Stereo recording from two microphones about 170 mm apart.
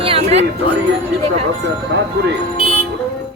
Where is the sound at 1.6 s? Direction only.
90° right.